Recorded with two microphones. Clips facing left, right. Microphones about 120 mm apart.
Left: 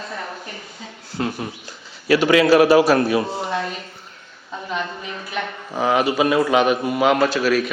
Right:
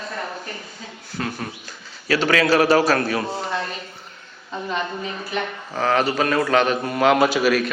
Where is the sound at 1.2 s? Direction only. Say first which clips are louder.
Left 3 dB; 20° left (ahead or behind).